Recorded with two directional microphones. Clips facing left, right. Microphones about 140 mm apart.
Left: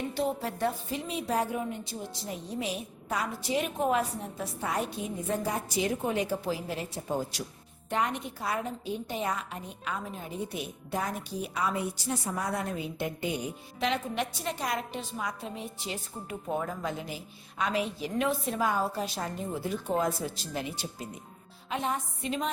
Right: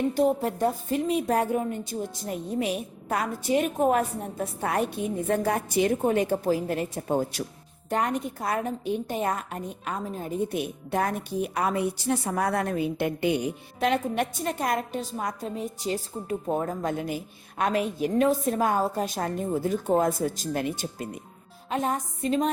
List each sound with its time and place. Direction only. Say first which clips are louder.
0.1 s a woman's voice: right 7 dB; 45° right (ahead or behind)
3.8 s a woman's voice: right 5 dB; 45° right (ahead or behind)
7.9 s a woman's voice: right 4 dB; 45° right (ahead or behind)
10.6 s a woman's voice: right 6 dB; 60° right (ahead or behind)
13.7 s a woman's voice: right 5 dB; 50° right (ahead or behind)
21.7 s a woman's voice: right 4 dB; 45° right (ahead or behind)